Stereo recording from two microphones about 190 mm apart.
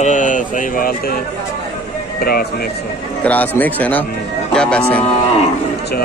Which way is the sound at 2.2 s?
55° left (ahead or behind).